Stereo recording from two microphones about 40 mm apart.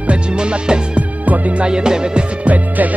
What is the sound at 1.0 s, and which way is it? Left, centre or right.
Music, right.